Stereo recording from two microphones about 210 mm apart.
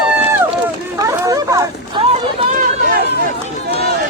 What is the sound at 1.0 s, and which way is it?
Chatter, 15° right (ahead or behind).